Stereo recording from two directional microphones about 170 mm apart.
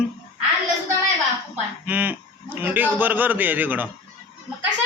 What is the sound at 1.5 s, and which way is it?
A man's voice, 10° right (ahead or behind).